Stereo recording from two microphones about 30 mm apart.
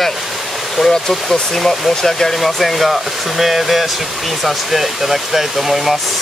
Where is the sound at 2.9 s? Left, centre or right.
Centre.